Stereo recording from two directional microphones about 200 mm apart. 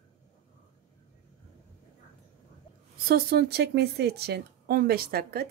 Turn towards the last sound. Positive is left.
turn(degrees=-50)  # may be behind; listen again after turning